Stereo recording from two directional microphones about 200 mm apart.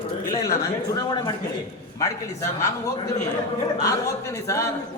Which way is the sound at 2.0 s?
15° left (ahead or behind).